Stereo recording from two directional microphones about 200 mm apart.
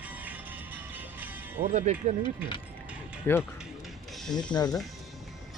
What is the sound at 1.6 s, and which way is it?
Speech, 35° right (ahead or behind).